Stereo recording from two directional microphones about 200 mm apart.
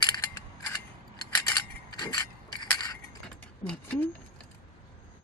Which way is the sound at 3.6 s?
5° left (ahead or behind).